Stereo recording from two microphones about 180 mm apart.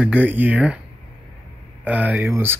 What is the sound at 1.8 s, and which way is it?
Speech, 10° right (ahead or behind).